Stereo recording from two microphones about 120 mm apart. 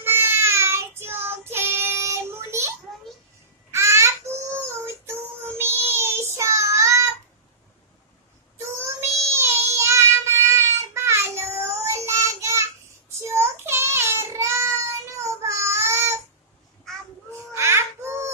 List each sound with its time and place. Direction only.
0.0 s child singing: 20° right (ahead or behind)
3.7 s child singing: 25° right (ahead or behind)
8.5 s child singing: 20° right (ahead or behind)
17.3 s babbling: 20° right (ahead or behind)